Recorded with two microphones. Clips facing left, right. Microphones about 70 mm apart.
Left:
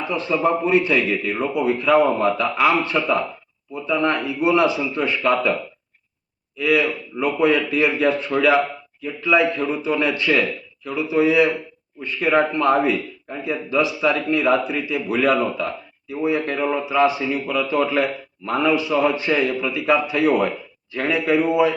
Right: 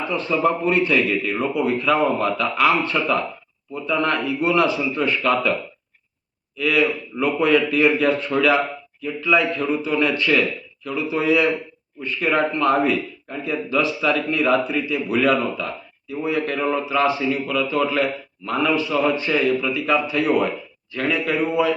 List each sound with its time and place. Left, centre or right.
0.1 s a man's voice: centre
6.6 s a man's voice: left
13.4 s a man's voice: centre
16.6 s a man's voice: centre